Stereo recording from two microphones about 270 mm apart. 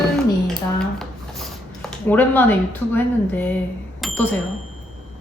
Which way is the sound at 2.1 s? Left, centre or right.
Centre.